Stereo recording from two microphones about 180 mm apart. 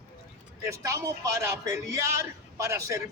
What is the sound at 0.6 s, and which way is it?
A man's voice, 15° right (ahead or behind).